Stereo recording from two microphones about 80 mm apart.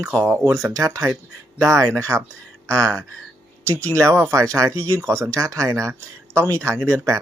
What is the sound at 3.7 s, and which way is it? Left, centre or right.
Speech, centre.